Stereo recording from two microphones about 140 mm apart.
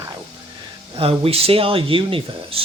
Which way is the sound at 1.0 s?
45° right (ahead or behind).